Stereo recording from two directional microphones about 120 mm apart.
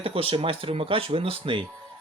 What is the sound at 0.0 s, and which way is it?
Speech, 50° right (ahead or behind).